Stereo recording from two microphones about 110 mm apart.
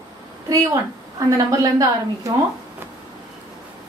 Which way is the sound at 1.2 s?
35° right (ahead or behind).